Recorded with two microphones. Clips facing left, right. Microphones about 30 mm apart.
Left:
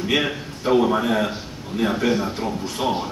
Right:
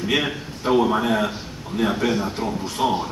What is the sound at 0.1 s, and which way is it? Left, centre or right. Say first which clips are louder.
A man's voice: left 1 dB; centre.